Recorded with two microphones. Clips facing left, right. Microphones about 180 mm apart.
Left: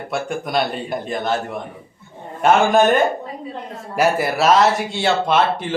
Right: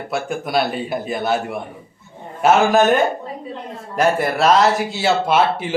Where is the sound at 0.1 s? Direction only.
5° right (ahead or behind).